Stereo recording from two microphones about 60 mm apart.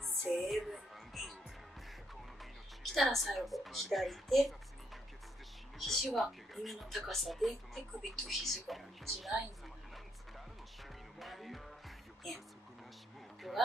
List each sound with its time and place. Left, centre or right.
0.0 s music: centre
2.8 s a woman's voice: centre
5.8 s music: centre
6.1 s a woman's voice: centre
11.1 s music: centre
13.4 s a sound: centre